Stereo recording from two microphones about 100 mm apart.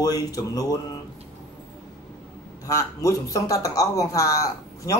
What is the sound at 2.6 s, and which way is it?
Speech, 30° left (ahead or behind).